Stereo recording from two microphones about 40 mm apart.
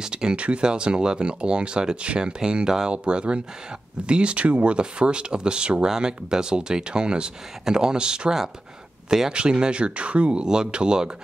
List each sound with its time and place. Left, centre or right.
0.0 s speech: right
10.4 s speech: centre